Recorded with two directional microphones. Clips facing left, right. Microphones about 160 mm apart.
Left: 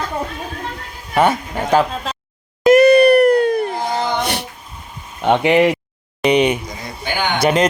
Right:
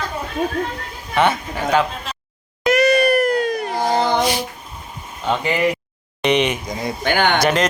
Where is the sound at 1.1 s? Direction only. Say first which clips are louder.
Left 2 dB; 40° left (ahead or behind).